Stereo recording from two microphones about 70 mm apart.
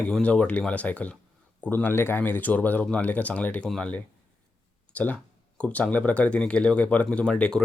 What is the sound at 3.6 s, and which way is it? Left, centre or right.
Speech, centre.